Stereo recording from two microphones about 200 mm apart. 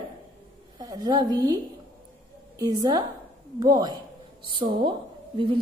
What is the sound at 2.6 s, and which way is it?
A woman's voice, 20° right (ahead or behind).